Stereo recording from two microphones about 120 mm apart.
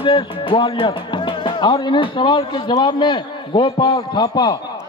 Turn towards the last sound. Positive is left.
turn(degrees=35)  # may be behind; listen again after turning